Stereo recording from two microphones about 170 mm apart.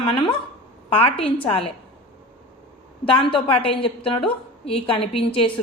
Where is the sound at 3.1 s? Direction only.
30° left (ahead or behind).